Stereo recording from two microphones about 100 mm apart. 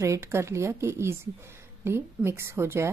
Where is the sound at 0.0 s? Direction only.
30° right (ahead or behind).